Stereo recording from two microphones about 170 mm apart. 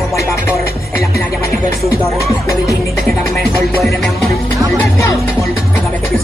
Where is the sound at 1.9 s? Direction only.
20° left (ahead or behind).